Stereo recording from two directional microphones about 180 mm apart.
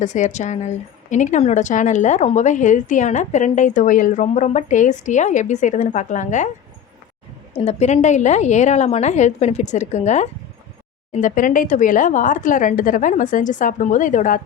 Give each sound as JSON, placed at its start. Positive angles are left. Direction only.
{"t": 0.0, "sound": "a woman's voice", "side_deg": 40}
{"t": 7.5, "sound": "a woman's voice", "side_deg": 35}